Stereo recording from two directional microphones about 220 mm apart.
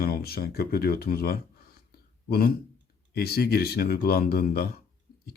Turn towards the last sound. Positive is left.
turn(degrees=45)  # may be behind; listen again after turning